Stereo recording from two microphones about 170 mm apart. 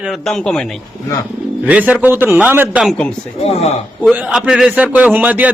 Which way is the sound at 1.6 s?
10° right (ahead or behind).